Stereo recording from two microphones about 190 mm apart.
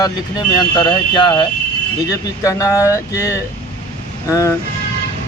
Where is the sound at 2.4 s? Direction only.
15° left (ahead or behind).